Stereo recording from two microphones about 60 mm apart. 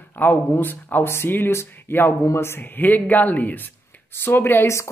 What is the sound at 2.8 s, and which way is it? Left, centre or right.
Speech, left.